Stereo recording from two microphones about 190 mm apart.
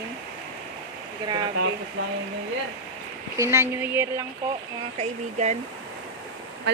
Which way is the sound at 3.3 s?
15° right (ahead or behind).